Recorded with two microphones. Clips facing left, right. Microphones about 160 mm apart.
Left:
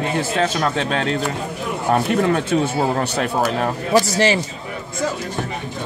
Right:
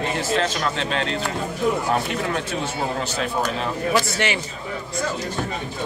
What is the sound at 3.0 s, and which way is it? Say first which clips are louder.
A man's voice: left 4 dB; 55° left (ahead or behind).